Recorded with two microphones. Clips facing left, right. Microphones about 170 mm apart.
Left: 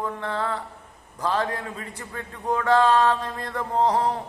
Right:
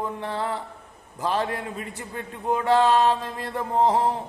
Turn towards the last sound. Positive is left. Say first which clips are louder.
# right 1 dB
turn(degrees=-15)  # may be behind; listen again after turning